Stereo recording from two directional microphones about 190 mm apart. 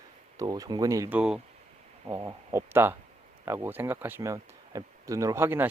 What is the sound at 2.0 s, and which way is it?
Speech, 20° right (ahead or behind).